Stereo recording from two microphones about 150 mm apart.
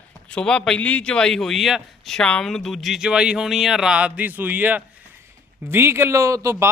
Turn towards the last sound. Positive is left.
turn(degrees=-20)  # may be behind; listen again after turning